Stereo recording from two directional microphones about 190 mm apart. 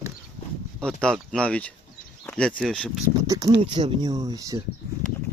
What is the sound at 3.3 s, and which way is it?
Speech, 20° right (ahead or behind).